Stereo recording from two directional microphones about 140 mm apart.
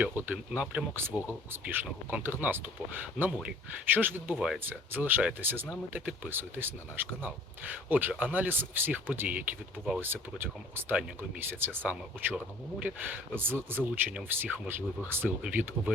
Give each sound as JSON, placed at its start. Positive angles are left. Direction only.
{"t": 0.0, "sound": "speech", "side_deg": -10}
{"t": 4.4, "sound": "speech", "side_deg": -5}
{"t": 4.6, "sound": "speech", "side_deg": -15}